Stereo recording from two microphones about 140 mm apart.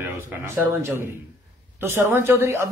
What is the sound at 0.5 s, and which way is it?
A man's voice, 20° right (ahead or behind).